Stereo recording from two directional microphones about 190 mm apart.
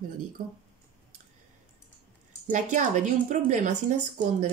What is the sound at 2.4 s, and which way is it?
Speech, 40° right (ahead or behind).